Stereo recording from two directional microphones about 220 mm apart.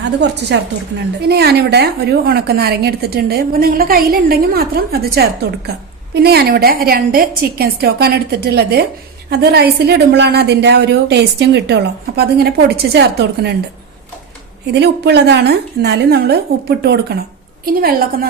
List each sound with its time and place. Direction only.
0.2 s a woman's voice: 50° right (ahead or behind)
14.7 s a woman's voice: 50° right (ahead or behind)